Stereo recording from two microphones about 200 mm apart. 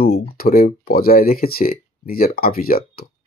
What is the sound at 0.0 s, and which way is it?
Speech, 50° left (ahead or behind).